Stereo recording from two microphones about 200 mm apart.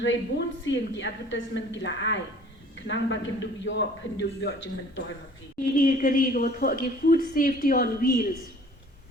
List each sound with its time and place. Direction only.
0.0 s a woman's voice: 70° left (ahead or behind)
5.7 s a woman's voice: 45° left (ahead or behind)